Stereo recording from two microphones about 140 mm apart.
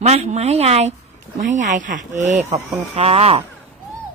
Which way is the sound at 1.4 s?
60° right (ahead or behind).